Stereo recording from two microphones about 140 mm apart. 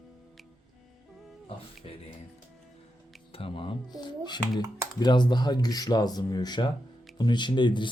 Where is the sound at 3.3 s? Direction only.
40° left (ahead or behind).